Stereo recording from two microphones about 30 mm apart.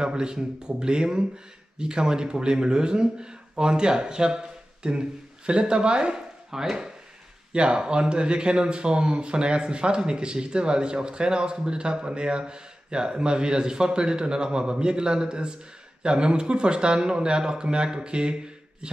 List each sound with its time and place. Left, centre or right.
0.0 s speech: right
6.5 s speech: centre
7.5 s speech: right